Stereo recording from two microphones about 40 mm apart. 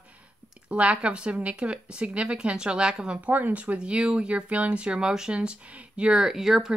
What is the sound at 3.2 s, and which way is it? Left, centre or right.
Speech, right.